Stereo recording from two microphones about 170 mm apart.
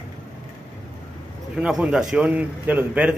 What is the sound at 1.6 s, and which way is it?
A man's voice, 5° right (ahead or behind).